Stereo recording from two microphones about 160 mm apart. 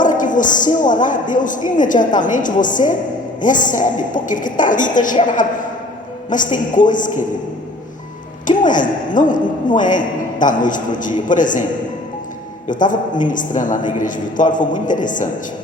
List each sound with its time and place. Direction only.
0.0 s a sound: 55° left (ahead or behind)
1.0 s a woman's voice: 55° left (ahead or behind)
8.4 s a woman's voice: 55° left (ahead or behind)
12.6 s a woman's voice: 55° left (ahead or behind)